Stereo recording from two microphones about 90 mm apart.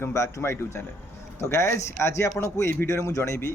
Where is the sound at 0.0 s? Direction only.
35° left (ahead or behind).